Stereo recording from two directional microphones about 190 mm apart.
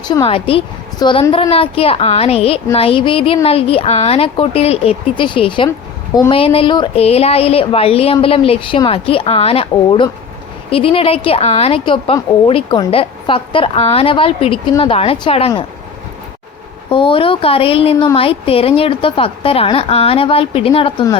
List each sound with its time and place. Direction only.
0.1 s a woman's voice: 30° left (ahead or behind)
16.9 s a woman's voice: 25° left (ahead or behind)